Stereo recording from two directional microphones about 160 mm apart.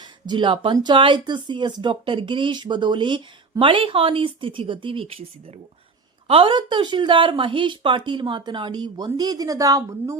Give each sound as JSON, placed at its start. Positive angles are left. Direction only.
{"t": 0.0, "sound": "speech", "side_deg": -30}
{"t": 6.2, "sound": "speech", "side_deg": -35}